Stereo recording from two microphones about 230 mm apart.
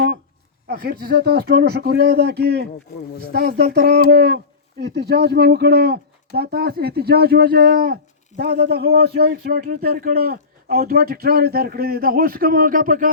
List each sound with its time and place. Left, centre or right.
0.7 s speech: right